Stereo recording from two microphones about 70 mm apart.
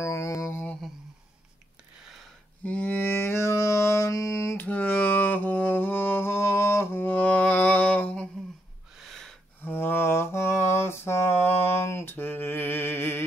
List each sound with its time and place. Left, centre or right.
0.0 s a sound: left
2.6 s music: left
4.6 s music: left
8.9 s gasp: centre
9.6 s mantra: left